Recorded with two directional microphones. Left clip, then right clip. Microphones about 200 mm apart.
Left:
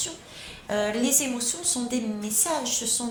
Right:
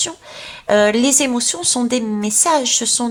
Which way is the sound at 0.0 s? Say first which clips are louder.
Right 10 dB; 35° right (ahead or behind).